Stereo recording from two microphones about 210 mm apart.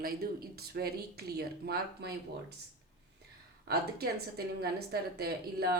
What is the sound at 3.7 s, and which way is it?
Speech, 50° right (ahead or behind).